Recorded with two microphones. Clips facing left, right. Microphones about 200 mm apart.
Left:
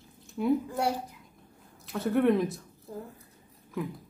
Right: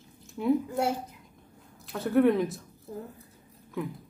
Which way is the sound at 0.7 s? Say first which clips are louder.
Right 1 dB; 25° right (ahead or behind).